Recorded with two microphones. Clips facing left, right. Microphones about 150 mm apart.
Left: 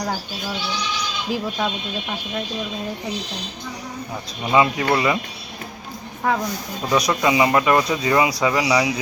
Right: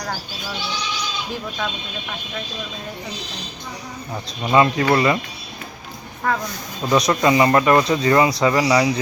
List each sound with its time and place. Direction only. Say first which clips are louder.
4.5 s speech: right 2 dB; 10° left (ahead or behind)
6.3 s speech: left 1 dB; 15° left (ahead or behind)